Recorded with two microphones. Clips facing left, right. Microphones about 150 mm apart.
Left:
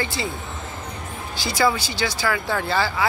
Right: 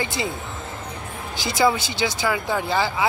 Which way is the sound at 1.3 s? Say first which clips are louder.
Right 1 dB; 20° right (ahead or behind).